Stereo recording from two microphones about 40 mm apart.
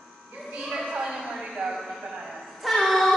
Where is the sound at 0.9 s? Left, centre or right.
Centre.